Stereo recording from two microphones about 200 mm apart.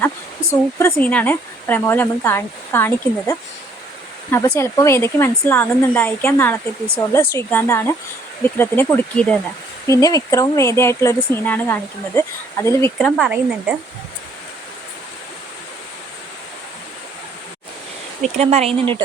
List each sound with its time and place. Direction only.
0.5 s speech: 15° left (ahead or behind)
13.0 s a woman's voice: centre (ahead or behind)
18.3 s speech: 30° right (ahead or behind)